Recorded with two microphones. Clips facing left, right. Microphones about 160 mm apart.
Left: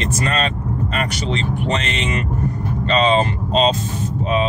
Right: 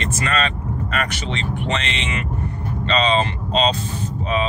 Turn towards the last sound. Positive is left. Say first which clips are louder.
# left 3 dB
turn(degrees=45)  # may be behind; listen again after turning